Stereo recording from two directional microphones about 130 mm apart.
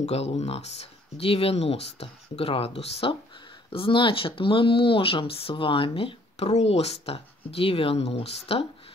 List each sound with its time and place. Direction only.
0.0 s speech: 55° left (ahead or behind)